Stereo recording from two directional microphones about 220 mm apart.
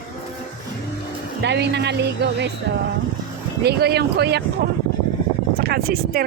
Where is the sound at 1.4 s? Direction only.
50° right (ahead or behind).